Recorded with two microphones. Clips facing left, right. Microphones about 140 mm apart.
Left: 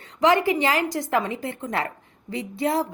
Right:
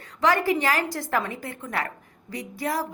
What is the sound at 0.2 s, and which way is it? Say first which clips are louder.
A woman's voice: left 3 dB; 20° left (ahead or behind).